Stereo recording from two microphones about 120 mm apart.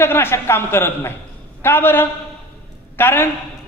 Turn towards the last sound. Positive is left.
turn(degrees=20)  # may be behind; listen again after turning